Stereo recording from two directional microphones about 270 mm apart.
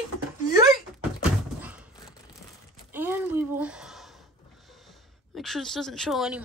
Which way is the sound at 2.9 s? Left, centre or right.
Centre.